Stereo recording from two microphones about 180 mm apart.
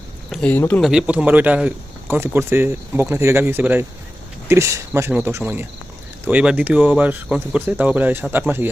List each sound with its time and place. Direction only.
0.3 s speech: 10° left (ahead or behind)
0.8 s speech: 5° right (ahead or behind)